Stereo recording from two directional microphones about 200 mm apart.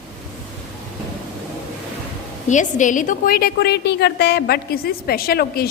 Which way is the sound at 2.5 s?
40° left (ahead or behind).